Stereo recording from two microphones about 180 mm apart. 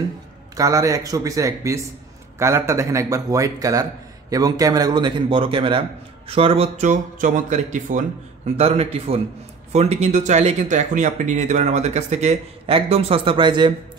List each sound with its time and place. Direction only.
0.6 s a man's voice: 20° right (ahead or behind)